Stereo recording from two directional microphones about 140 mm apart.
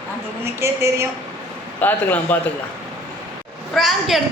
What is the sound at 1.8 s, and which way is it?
Speech, 15° left (ahead or behind).